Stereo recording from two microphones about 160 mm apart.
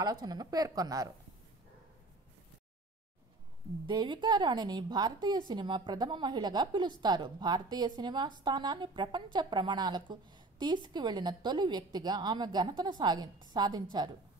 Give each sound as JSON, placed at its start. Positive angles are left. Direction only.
{"t": 0.0, "sound": "a woman's voice", "side_deg": -25}
{"t": 3.8, "sound": "a woman's voice", "side_deg": -30}